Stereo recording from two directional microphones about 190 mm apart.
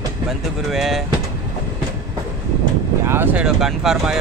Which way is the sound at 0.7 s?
Centre (ahead or behind).